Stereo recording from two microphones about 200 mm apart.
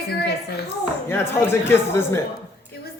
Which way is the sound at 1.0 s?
10° left (ahead or behind).